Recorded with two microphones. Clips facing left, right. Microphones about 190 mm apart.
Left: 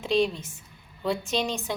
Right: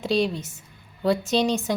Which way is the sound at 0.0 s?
40° right (ahead or behind).